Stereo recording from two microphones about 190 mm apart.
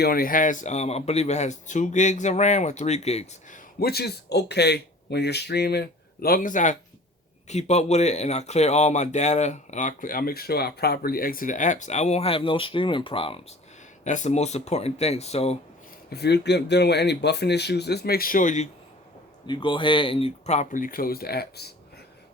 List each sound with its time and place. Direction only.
0.0 s speech: 50° left (ahead or behind); by 3.6 s 35° left (ahead or behind)
3.8 s speech: 55° left (ahead or behind); by 13.4 s 30° left (ahead or behind)
14.0 s speech: 40° left (ahead or behind)
16.0 s speech: 60° left (ahead or behind); by 18.7 s 40° left (ahead or behind)
19.5 s speech: 25° left (ahead or behind); by 21.7 s 55° left (ahead or behind)